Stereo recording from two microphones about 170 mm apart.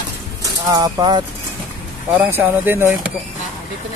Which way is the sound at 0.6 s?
20° right (ahead or behind).